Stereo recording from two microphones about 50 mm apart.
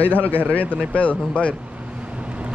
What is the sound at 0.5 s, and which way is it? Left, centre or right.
Speech, left.